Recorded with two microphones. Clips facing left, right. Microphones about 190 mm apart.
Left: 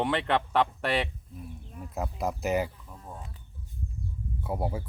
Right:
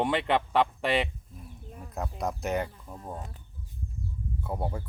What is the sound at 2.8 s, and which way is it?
Speech, 40° right (ahead or behind).